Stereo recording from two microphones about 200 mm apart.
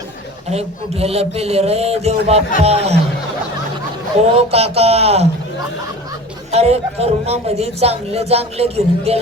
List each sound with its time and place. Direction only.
0.5 s a man's voice: 30° right (ahead or behind)
4.4 s a man's voice: 30° right (ahead or behind)
6.5 s a man's voice: 30° right (ahead or behind)